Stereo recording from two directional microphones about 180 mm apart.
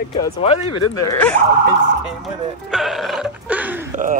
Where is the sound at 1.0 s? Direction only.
10° left (ahead or behind).